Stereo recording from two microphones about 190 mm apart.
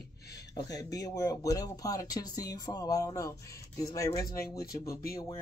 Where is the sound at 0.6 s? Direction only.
20° left (ahead or behind).